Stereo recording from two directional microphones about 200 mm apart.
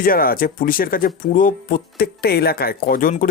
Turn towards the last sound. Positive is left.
turn(degrees=45)  # may be behind; listen again after turning